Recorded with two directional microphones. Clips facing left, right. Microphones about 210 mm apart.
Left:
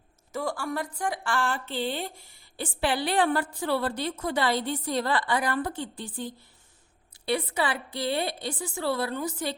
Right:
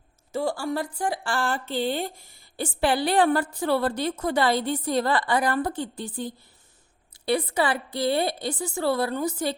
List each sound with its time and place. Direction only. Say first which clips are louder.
0.3 s a woman's voice: right 4 dB; 30° right (ahead or behind)